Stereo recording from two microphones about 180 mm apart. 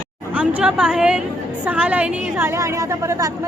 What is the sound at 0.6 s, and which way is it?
A woman's voice, 5° right (ahead or behind).